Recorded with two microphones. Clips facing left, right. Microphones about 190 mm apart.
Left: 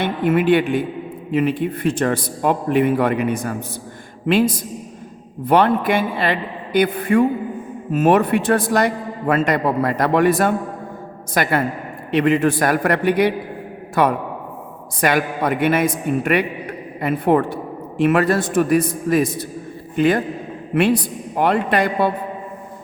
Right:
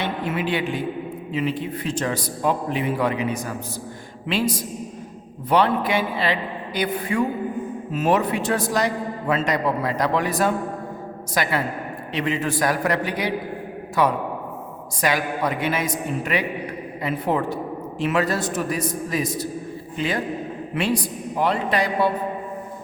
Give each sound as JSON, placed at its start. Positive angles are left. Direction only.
{"t": 0.0, "sound": "a man's voice", "side_deg": 55}
{"t": 21.3, "sound": "a man's voice", "side_deg": 55}